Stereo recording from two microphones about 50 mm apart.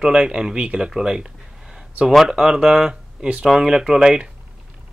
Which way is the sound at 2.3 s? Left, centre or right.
Centre.